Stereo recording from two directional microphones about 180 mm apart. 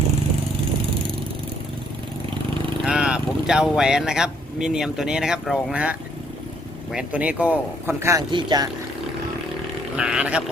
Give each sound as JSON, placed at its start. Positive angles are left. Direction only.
{"t": 2.8, "sound": "speech", "side_deg": -5}
{"t": 8.3, "sound": "speech", "side_deg": -25}
{"t": 10.0, "sound": "speech", "side_deg": -5}